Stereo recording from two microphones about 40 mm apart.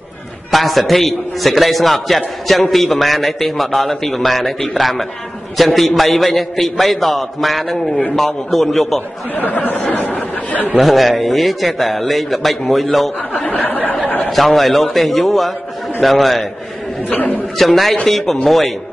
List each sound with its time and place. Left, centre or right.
0.5 s a man's voice: centre
9.4 s chatter: left
10.8 s a man's voice: centre
13.3 s speech: left
14.0 s a sound: left
14.3 s a man's voice: centre
17.1 s a man's voice: left
17.6 s a man's voice: centre